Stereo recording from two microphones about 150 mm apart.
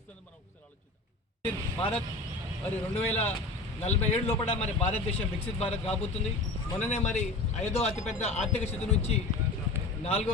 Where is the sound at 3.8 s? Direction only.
45° left (ahead or behind).